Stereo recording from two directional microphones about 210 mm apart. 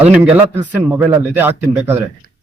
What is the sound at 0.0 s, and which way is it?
A man's voice, 10° right (ahead or behind).